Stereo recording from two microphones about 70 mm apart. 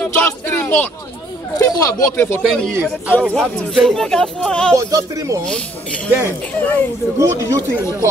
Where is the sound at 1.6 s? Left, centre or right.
Left.